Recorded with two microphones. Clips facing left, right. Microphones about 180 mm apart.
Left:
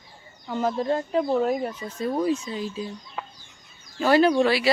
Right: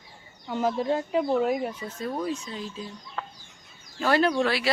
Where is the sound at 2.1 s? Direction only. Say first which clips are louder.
Left 8 dB; 5° left (ahead or behind).